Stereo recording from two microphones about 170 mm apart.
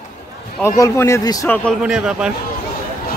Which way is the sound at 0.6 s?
15° left (ahead or behind).